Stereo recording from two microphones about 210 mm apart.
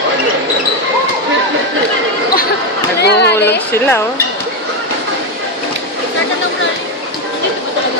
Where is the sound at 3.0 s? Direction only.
50° left (ahead or behind).